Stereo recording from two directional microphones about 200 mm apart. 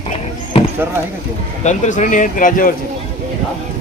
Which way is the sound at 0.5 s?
25° left (ahead or behind).